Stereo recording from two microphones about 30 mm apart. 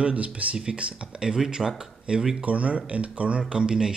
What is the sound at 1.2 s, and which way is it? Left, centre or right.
Speech, right.